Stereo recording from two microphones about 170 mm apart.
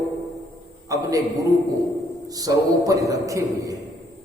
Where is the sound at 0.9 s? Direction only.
20° right (ahead or behind).